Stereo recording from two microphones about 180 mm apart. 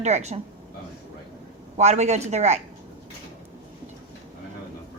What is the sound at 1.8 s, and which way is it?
Speech, 40° right (ahead or behind).